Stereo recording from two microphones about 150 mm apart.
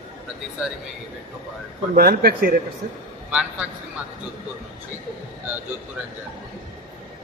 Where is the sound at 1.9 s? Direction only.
90° right.